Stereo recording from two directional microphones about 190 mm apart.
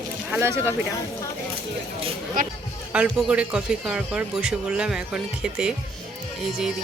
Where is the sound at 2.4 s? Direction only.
45° right (ahead or behind).